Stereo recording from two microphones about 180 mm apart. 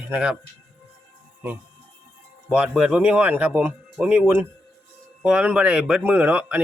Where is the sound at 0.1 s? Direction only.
5° right (ahead or behind).